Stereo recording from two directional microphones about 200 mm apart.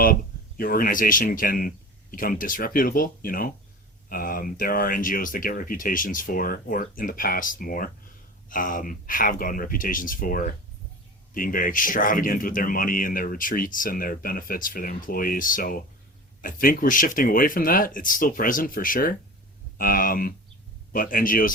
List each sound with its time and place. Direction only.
0.0 s speech: 45° left (ahead or behind)